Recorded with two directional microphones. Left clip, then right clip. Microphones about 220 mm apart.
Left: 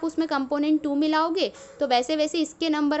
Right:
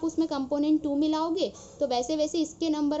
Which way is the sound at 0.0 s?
20° left (ahead or behind).